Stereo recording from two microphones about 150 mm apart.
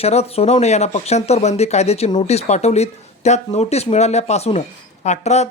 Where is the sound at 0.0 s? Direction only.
45° left (ahead or behind).